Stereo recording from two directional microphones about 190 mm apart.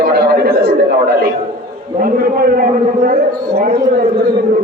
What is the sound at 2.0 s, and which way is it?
A man's voice, 50° right (ahead or behind).